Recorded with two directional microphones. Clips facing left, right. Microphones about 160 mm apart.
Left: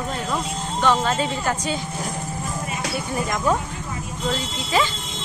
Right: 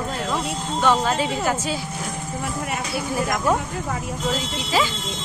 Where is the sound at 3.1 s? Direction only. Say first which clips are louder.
Right 1 dB; 5° right (ahead or behind).